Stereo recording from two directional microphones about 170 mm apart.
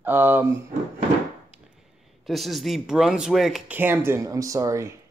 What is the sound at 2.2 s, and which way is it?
Speech, centre (ahead or behind).